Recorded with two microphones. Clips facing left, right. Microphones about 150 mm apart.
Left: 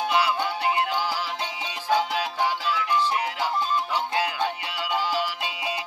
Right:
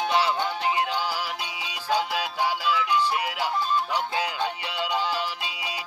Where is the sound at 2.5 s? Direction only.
10° right (ahead or behind).